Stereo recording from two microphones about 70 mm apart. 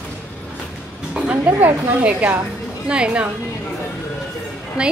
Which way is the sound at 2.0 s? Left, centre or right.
Right.